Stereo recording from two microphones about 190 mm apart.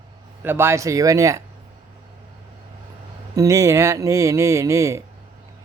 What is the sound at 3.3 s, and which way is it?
Speech, 15° right (ahead or behind).